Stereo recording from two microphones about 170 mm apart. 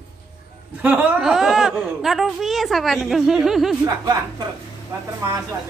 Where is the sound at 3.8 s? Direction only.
20° right (ahead or behind).